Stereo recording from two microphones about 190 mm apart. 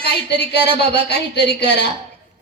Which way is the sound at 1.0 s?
60° left (ahead or behind).